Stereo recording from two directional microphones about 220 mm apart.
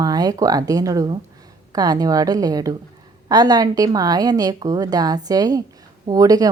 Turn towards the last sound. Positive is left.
turn(degrees=-15)  # may be behind; listen again after turning